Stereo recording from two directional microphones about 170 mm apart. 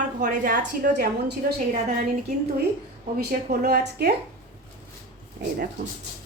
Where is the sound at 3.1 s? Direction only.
60° right (ahead or behind).